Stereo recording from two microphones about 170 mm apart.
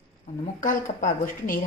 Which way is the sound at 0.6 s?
50° left (ahead or behind).